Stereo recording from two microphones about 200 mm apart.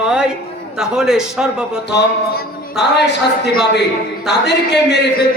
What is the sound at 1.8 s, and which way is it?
Speech, 60° left (ahead or behind).